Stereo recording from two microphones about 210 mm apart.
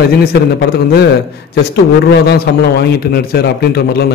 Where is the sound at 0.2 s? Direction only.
50° left (ahead or behind).